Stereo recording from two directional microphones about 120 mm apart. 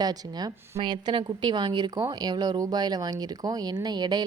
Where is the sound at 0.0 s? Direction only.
35° right (ahead or behind).